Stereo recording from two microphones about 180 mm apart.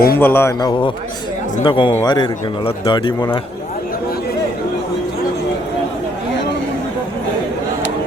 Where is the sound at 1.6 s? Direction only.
25° left (ahead or behind).